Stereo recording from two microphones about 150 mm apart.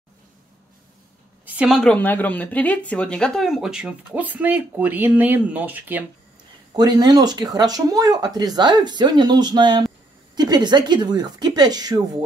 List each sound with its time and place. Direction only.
1.4 s a woman's voice: 10° right (ahead or behind)
6.7 s speech: 25° right (ahead or behind)